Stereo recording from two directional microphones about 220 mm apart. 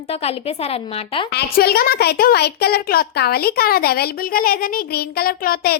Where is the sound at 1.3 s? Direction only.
45° left (ahead or behind).